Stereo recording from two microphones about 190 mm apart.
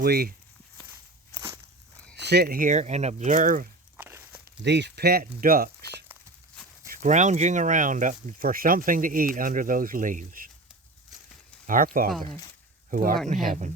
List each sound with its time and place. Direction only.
0.0 s speech: 55° right (ahead or behind)
2.1 s speech: 60° right (ahead or behind); by 3.7 s 45° right (ahead or behind)
3.9 s walk: 10° right (ahead or behind)
4.6 s speech: 65° right (ahead or behind); by 10.5 s 45° right (ahead or behind)
11.6 s speech: 45° right (ahead or behind)
12.9 s speech: 45° right (ahead or behind)